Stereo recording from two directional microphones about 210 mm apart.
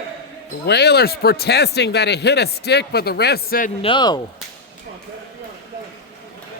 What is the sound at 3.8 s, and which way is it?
Speech, 20° left (ahead or behind).